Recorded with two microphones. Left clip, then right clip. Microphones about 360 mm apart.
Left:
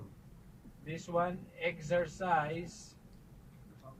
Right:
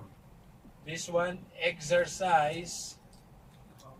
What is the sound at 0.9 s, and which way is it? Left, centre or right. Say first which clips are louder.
Speech: right 3 dB; right.